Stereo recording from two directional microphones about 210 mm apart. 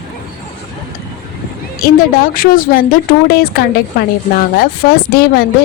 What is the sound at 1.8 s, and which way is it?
A woman's voice, 45° left (ahead or behind).